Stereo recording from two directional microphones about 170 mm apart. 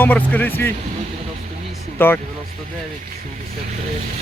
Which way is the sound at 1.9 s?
10° left (ahead or behind).